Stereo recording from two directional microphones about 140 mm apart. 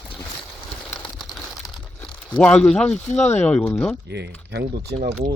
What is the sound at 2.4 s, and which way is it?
Speech, 10° left (ahead or behind).